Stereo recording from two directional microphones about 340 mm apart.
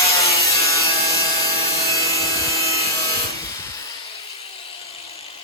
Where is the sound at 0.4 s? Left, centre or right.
Centre.